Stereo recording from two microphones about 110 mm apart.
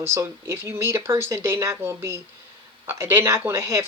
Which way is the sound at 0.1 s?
25° right (ahead or behind).